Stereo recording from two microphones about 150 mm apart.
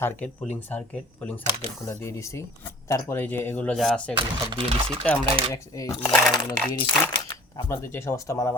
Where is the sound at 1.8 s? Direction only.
20° left (ahead or behind); by 4.1 s 5° left (ahead or behind).